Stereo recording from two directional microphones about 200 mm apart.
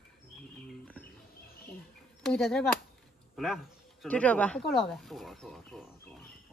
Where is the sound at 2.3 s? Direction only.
Centre (ahead or behind).